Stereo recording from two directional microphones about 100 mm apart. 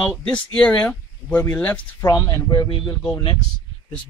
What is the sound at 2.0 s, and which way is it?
Speech, 30° left (ahead or behind).